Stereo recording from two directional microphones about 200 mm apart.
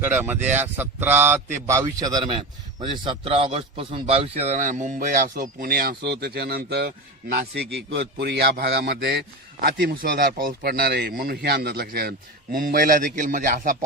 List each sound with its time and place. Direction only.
0.0 s a man's voice: 10° right (ahead or behind); by 13.7 s 40° right (ahead or behind)